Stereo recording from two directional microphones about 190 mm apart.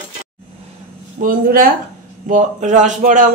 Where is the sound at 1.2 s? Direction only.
50° right (ahead or behind).